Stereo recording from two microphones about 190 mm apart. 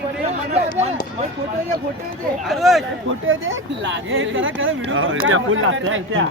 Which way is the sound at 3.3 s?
90° right.